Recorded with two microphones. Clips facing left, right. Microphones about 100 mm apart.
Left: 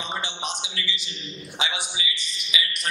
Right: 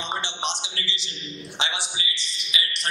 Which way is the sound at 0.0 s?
30° right (ahead or behind).